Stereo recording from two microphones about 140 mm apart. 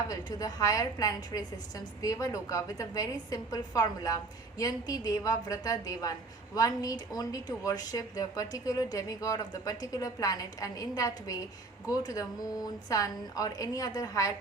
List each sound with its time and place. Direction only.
0.1 s a woman's voice: 25° left (ahead or behind)